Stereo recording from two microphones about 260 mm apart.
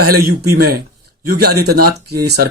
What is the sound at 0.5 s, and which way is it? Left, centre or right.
Speech, right.